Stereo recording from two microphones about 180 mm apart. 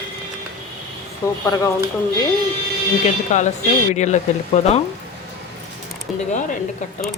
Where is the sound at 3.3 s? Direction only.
40° left (ahead or behind).